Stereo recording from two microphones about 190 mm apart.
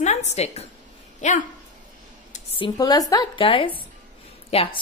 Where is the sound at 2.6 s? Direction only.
20° left (ahead or behind).